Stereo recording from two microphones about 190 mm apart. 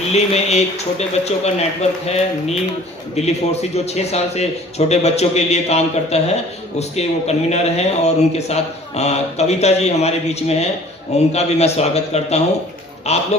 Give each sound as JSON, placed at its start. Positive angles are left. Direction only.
{"t": 0.1, "sound": "a man's voice", "side_deg": 35}
{"t": 3.2, "sound": "a man's voice", "side_deg": 35}